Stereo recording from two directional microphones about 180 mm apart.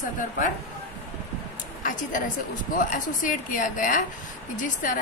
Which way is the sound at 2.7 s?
50° left (ahead or behind).